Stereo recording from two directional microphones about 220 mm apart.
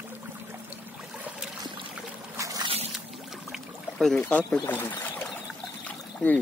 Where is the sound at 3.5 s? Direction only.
Centre (ahead or behind).